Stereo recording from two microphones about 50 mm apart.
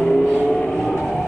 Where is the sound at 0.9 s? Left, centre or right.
Centre.